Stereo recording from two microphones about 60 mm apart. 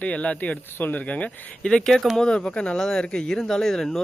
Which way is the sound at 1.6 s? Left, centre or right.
Centre.